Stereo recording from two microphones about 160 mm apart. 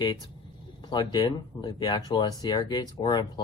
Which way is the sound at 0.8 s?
25° left (ahead or behind).